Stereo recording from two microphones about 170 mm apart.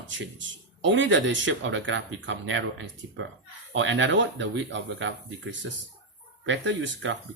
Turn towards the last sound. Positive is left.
turn(degrees=-90)